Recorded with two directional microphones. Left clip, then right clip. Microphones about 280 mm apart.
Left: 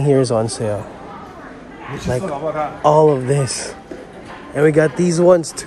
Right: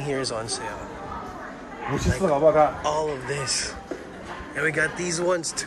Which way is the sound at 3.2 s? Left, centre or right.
Centre.